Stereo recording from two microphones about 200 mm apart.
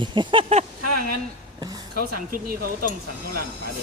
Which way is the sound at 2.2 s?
45° right (ahead or behind).